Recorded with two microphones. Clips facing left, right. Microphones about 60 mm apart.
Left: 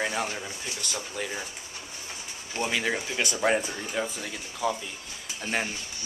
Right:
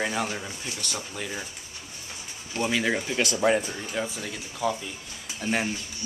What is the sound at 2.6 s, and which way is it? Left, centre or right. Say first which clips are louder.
Speech: right 2 dB; centre.